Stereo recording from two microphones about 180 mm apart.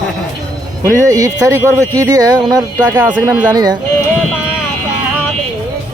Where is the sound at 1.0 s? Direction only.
20° right (ahead or behind).